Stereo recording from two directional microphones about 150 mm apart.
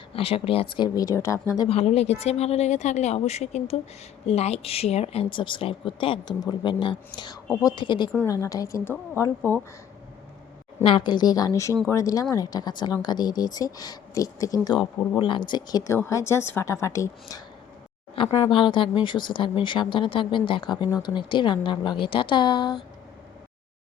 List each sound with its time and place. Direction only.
0.1 s a woman's voice: 40° left (ahead or behind); by 1.6 s 20° left (ahead or behind)
1.6 s a woman's voice: 45° left (ahead or behind); by 9.6 s 15° left (ahead or behind)
10.8 s a woman's voice: 35° left (ahead or behind)